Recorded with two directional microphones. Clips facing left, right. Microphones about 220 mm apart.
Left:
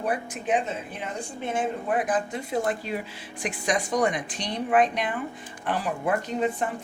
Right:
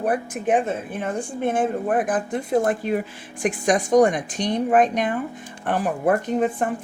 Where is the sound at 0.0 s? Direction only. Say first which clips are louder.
Right 6 dB; 50° right (ahead or behind).